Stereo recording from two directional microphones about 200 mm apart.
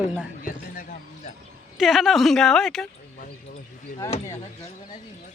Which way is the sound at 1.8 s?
Centre (ahead or behind).